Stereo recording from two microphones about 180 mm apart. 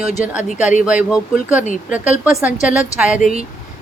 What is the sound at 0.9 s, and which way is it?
Speech, 5° right (ahead or behind).